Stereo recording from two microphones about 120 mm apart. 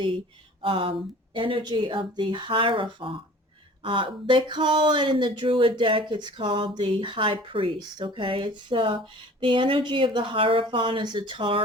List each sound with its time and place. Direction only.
0.6 s speech: 45° right (ahead or behind)